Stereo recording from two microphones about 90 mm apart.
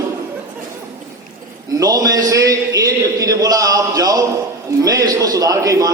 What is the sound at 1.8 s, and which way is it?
A man's voice, 40° right (ahead or behind).